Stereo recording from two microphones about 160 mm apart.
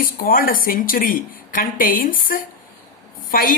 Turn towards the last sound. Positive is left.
turn(degrees=65)  # may be behind; listen again after turning